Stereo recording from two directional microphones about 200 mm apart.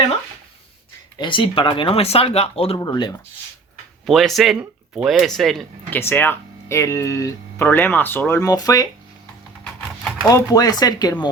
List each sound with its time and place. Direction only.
1.2 s speech: 25° left (ahead or behind)
4.0 s speech: centre (ahead or behind); by 8.9 s 20° left (ahead or behind)
10.0 s a sound: centre (ahead or behind)
10.2 s speech: 20° left (ahead or behind)